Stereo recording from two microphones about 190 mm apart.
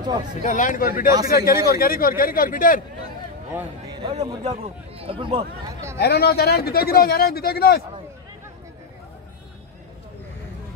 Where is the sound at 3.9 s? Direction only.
25° right (ahead or behind).